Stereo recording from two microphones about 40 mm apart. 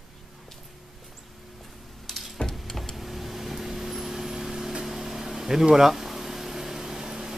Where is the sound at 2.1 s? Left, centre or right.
Centre.